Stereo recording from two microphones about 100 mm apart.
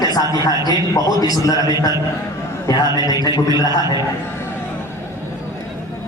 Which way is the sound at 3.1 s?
40° left (ahead or behind).